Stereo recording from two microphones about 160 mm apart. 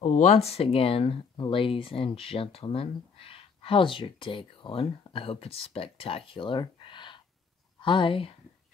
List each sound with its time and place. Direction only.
0.0 s speech: 45° left (ahead or behind)